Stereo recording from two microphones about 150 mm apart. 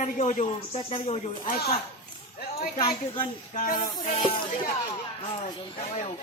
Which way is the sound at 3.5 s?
60° left (ahead or behind).